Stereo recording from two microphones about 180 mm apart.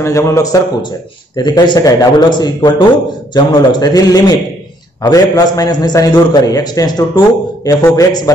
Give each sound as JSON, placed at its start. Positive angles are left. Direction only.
{"t": 0.0, "sound": "a man's voice", "side_deg": 15}